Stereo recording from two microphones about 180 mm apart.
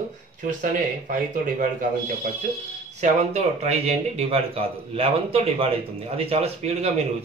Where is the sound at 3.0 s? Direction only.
40° right (ahead or behind).